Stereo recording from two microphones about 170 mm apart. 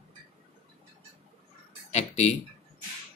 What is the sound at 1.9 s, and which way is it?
Speech, 40° left (ahead or behind).